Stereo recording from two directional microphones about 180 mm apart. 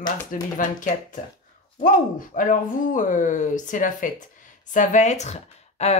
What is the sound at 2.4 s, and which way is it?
Speech, 45° left (ahead or behind).